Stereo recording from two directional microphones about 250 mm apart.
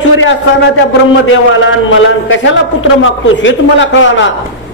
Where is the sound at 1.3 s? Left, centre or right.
Left.